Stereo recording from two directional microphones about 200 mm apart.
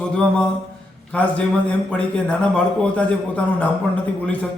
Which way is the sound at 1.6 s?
5° left (ahead or behind).